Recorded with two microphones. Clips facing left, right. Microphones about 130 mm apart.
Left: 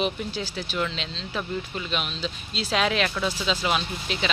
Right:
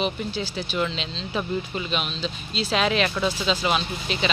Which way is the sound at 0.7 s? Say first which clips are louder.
Right 2 dB; centre (ahead or behind).